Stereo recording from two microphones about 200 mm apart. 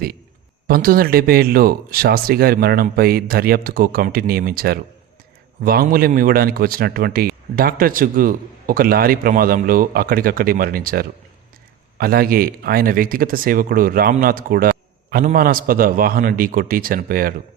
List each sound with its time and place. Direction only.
0.7 s a man's voice: 45° right (ahead or behind)